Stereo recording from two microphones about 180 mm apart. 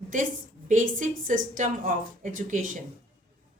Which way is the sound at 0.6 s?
45° right (ahead or behind).